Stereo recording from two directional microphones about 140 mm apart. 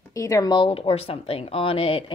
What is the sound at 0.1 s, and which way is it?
A woman's voice, 25° left (ahead or behind).